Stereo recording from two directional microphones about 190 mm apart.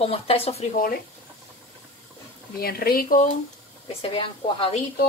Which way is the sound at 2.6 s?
55° left (ahead or behind).